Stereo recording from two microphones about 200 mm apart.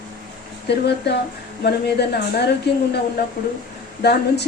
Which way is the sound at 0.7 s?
55° left (ahead or behind).